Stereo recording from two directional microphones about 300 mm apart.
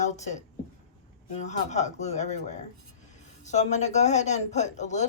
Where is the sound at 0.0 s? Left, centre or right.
Left.